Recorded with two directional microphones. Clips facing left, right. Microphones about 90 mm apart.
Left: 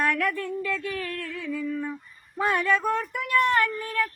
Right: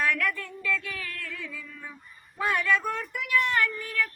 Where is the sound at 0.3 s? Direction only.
45° left (ahead or behind).